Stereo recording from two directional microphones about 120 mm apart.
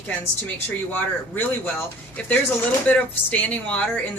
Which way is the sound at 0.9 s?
15° left (ahead or behind).